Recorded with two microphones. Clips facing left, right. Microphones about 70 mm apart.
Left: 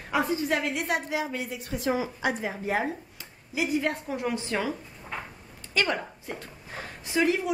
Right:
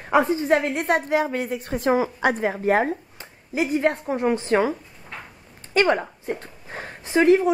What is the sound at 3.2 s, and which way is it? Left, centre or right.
A woman's voice, right.